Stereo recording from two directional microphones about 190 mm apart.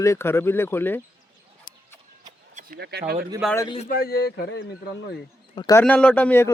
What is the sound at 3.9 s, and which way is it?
Speech, 55° left (ahead or behind).